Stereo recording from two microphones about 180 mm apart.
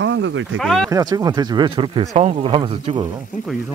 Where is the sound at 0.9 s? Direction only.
20° right (ahead or behind).